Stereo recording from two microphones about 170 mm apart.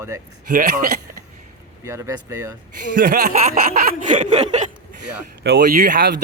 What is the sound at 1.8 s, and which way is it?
Speech, 15° right (ahead or behind).